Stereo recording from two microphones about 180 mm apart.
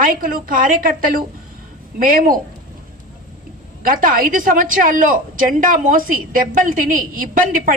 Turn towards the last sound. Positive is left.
turn(degrees=-50)  # may be behind; listen again after turning